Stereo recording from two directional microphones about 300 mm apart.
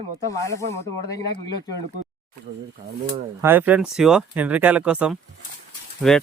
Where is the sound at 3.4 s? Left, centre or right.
Centre.